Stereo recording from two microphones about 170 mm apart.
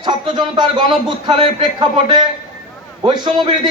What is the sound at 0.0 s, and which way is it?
A man's voice, 25° right (ahead or behind).